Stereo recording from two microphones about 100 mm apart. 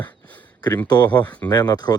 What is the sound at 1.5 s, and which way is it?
Speech, 45° left (ahead or behind).